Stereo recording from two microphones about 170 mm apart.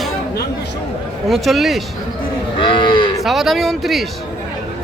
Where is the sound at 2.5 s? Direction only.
30° left (ahead or behind).